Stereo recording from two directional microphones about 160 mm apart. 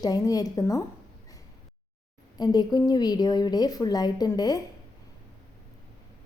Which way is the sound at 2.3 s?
25° left (ahead or behind).